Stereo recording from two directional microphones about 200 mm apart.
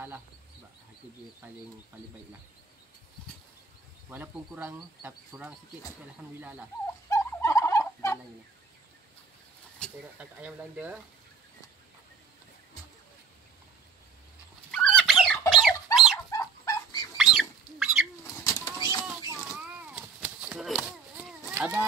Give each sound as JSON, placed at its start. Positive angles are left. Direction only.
{"t": 4.1, "sound": "speech", "side_deg": -10}
{"t": 7.1, "sound": "fowl", "side_deg": 15}
{"t": 9.8, "sound": "speech", "side_deg": 5}
{"t": 10.1, "sound": "speech", "side_deg": -5}
{"t": 14.7, "sound": "fowl", "side_deg": 5}
{"t": 15.6, "sound": "chicken", "side_deg": 0}
{"t": 16.3, "sound": "dog", "side_deg": 15}
{"t": 17.2, "sound": "a sound", "side_deg": 0}
{"t": 18.2, "sound": "bird flight", "side_deg": 15}
{"t": 19.5, "sound": "a sound", "side_deg": -5}